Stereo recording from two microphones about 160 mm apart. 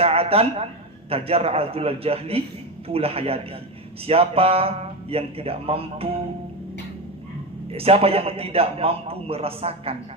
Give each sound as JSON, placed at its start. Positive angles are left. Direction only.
{"t": 0.0, "sound": "a man's voice", "side_deg": -40}
{"t": 7.7, "sound": "a man's voice", "side_deg": -35}